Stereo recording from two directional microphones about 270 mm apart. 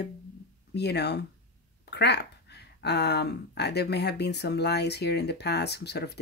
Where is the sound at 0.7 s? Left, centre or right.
Left.